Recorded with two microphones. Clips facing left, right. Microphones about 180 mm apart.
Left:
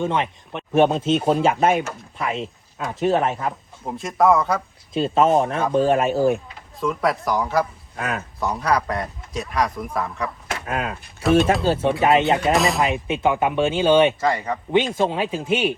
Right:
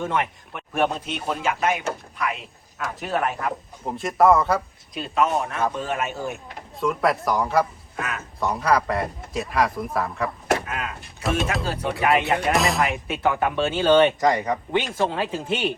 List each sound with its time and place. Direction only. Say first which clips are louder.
0.0 s speech: left 3 dB; 20° left (ahead or behind)
3.8 s speech: even; centre (ahead or behind)
4.9 s speech: left 6 dB; 30° left (ahead or behind)
6.7 s speech: even; centre (ahead or behind)
10.7 s speech: left 5 dB; 35° left (ahead or behind)
11.0 s speech: left 9 dB; centre (ahead or behind)
11.6 s speech: left 5 dB; 25° left (ahead or behind)
12.5 s speech: left 2 dB; centre (ahead or behind)
12.8 s speech: left 3 dB; 20° left (ahead or behind)
14.2 s speech: right 1 dB; 15° right (ahead or behind)
14.7 s speech: left 7 dB; 20° left (ahead or behind)